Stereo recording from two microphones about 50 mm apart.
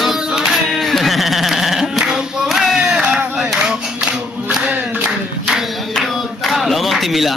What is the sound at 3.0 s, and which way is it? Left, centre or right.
Crowd, centre.